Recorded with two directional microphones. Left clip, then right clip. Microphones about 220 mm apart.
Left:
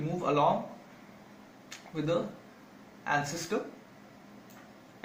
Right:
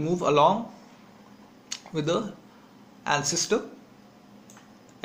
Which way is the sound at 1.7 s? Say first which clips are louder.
Right 6 dB; 35° right (ahead or behind).